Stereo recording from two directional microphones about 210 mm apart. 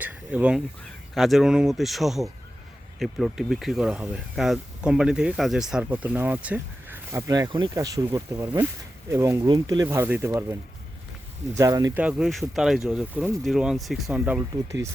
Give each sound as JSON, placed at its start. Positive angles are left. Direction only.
{"t": 0.0, "sound": "speech", "side_deg": -5}
{"t": 12.0, "sound": "speech", "side_deg": -5}